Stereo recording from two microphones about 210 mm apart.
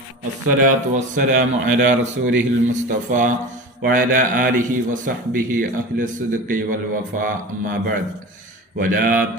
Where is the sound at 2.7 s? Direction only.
35° right (ahead or behind).